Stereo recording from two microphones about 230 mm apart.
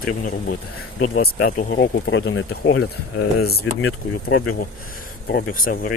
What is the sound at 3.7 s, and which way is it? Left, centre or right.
Speech, left.